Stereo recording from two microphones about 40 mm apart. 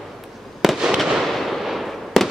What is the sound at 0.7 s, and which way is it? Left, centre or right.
Fireworks, centre.